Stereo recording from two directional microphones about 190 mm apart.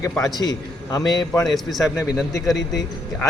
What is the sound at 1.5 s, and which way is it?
Speech, centre (ahead or behind).